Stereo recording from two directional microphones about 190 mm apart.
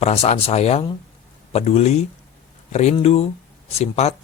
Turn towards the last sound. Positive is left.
turn(degrees=35)  # may be behind; listen again after turning